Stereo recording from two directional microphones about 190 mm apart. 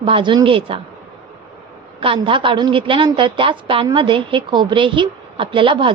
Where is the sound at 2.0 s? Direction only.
25° right (ahead or behind).